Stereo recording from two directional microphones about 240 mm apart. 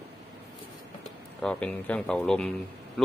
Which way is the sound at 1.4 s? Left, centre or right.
Centre.